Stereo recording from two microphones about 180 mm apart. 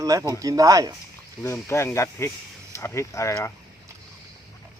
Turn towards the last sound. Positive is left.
turn(degrees=15)  # may be behind; listen again after turning